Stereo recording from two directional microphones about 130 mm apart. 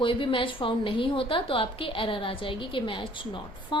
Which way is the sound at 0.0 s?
40° left (ahead or behind).